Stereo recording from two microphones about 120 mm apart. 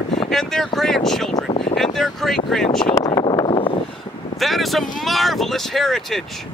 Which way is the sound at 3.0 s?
35° left (ahead or behind).